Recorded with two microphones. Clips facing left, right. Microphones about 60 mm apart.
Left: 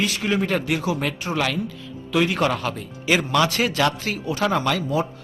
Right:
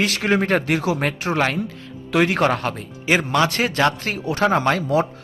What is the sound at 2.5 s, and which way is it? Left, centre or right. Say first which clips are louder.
Speech: right 2 dB; right.